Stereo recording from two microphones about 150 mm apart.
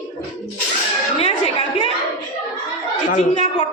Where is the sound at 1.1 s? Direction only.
40° left (ahead or behind).